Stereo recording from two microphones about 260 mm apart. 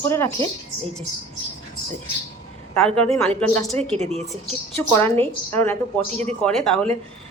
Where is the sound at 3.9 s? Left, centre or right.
Right.